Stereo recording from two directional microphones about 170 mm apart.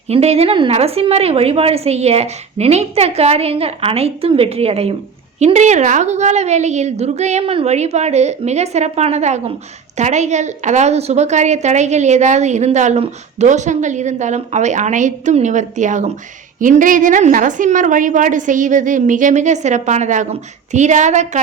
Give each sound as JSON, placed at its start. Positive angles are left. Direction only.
{"t": 0.1, "sound": "a woman's voice", "side_deg": -35}